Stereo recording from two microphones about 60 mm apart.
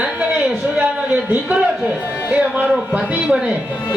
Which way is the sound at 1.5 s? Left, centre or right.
Right.